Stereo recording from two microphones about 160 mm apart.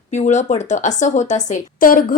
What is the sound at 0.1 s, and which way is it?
A woman's voice, 45° left (ahead or behind).